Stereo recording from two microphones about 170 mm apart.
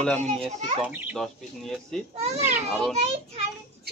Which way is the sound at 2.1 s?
40° right (ahead or behind).